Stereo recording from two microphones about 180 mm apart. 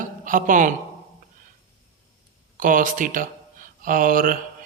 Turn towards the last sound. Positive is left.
turn(degrees=-50)  # may be behind; listen again after turning